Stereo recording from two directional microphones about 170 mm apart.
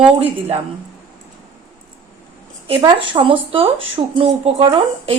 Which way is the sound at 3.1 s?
30° right (ahead or behind).